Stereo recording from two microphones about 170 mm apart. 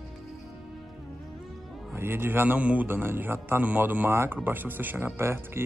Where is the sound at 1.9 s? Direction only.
15° right (ahead or behind).